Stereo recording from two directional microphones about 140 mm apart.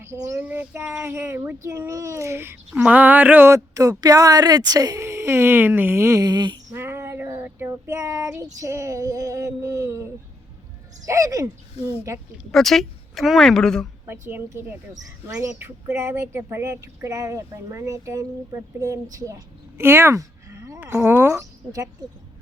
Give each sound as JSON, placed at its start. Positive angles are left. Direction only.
{"t": 0.0, "sound": "child singing", "side_deg": -20}
{"t": 1.6, "sound": "a woman's voice", "side_deg": -20}
{"t": 6.7, "sound": "child singing", "side_deg": -20}
{"t": 8.6, "sound": "a woman's voice", "side_deg": -20}
{"t": 12.5, "sound": "speech", "side_deg": 0}
{"t": 14.1, "sound": "child singing", "side_deg": -15}
{"t": 15.3, "sound": "a woman's voice", "side_deg": -20}